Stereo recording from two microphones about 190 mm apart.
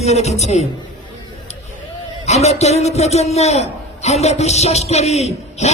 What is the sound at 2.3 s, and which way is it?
A man's voice, 35° left (ahead or behind).